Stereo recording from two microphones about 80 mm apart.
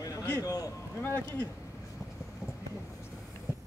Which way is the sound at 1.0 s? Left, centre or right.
Left.